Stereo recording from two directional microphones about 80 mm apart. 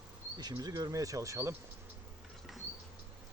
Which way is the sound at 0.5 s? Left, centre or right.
Right.